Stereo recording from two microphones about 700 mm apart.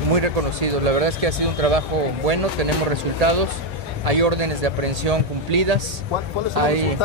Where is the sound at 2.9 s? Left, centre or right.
Right.